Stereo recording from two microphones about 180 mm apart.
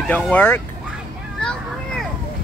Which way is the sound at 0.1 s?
10° left (ahead or behind).